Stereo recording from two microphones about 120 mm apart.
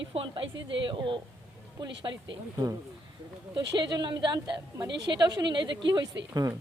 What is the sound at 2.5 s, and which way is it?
Speech, 25° right (ahead or behind).